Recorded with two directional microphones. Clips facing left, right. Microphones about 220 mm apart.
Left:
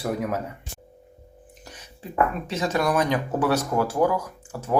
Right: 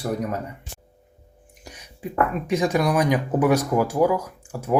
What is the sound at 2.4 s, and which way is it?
Speech, 10° right (ahead or behind).